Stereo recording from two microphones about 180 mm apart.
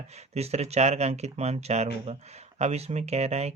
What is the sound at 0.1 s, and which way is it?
Speech, 35° right (ahead or behind).